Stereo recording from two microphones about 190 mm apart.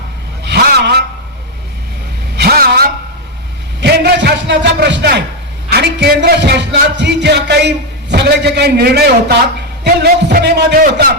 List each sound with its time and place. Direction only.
0.4 s vehicle: 60° right (ahead or behind)
2.3 s vehicle: 55° right (ahead or behind)
3.8 s a sound: 60° right (ahead or behind)
5.7 s a man's voice: 60° right (ahead or behind)